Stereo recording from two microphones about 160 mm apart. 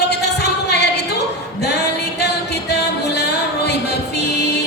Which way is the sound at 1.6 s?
90° left.